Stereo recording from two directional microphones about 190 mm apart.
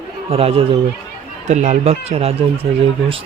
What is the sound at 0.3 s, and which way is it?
Speech, 30° right (ahead or behind).